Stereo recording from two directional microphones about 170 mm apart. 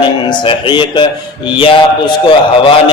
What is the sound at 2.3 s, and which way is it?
Speech, 30° left (ahead or behind).